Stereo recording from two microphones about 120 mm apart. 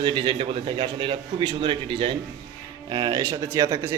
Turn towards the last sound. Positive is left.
turn(degrees=-25)  # may be behind; listen again after turning